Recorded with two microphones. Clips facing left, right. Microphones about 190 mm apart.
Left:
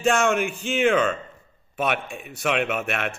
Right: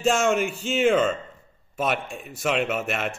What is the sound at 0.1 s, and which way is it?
Speech, 60° left (ahead or behind).